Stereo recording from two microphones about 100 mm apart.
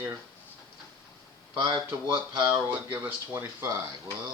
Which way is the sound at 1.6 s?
40° right (ahead or behind).